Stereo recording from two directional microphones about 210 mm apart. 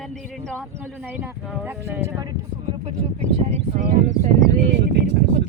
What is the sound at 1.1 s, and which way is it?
Speech, 10° right (ahead or behind).